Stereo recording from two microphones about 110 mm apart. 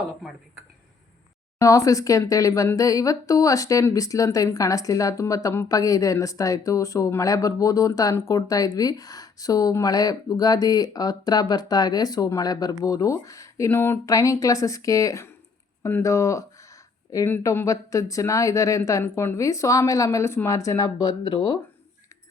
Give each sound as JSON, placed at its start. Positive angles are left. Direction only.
{"t": 1.5, "sound": "speech", "side_deg": 30}
{"t": 15.8, "sound": "a sound", "side_deg": 25}
{"t": 17.3, "sound": "speech", "side_deg": 20}